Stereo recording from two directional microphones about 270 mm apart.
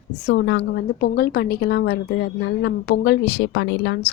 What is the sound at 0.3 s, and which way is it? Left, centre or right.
A woman's voice, left.